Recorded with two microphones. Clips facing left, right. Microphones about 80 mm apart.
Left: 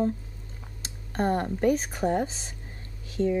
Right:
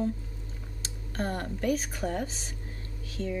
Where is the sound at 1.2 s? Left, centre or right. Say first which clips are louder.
Left 7 dB; left.